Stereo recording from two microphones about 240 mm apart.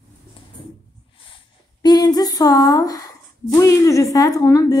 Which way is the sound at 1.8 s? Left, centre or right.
Centre.